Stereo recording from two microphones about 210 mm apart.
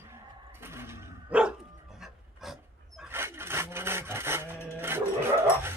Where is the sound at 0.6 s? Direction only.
10° right (ahead or behind).